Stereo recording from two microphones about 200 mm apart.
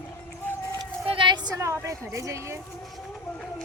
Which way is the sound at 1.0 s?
25° right (ahead or behind).